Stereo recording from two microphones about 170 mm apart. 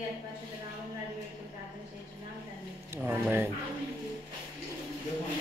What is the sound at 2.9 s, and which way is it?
Speech, 15° right (ahead or behind).